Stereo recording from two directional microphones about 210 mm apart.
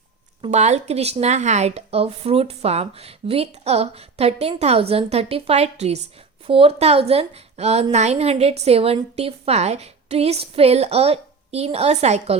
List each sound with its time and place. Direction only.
0.4 s speech: 30° right (ahead or behind)